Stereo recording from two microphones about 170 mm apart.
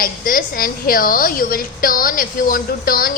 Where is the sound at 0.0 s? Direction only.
55° left (ahead or behind).